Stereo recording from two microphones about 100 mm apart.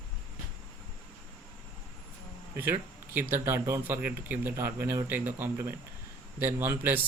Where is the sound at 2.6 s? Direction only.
20° right (ahead or behind).